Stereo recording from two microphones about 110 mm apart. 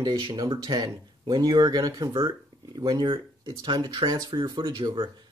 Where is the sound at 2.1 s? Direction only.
45° right (ahead or behind).